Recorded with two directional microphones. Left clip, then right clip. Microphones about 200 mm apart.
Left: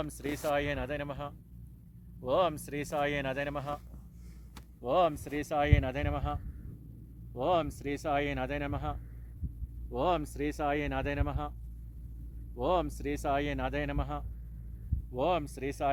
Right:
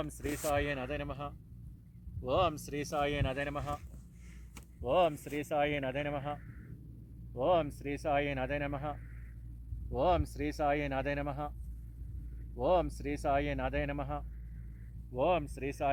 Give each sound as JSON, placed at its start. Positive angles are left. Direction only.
{"t": 0.0, "sound": "speech", "side_deg": 0}
{"t": 0.4, "sound": "speech", "side_deg": 10}
{"t": 4.5, "sound": "a sound", "side_deg": -15}
{"t": 5.1, "sound": "speech", "side_deg": -30}
{"t": 12.5, "sound": "speech", "side_deg": -40}
{"t": 15.1, "sound": "speech", "side_deg": -25}